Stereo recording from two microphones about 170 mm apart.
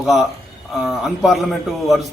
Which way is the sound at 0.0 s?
Centre (ahead or behind).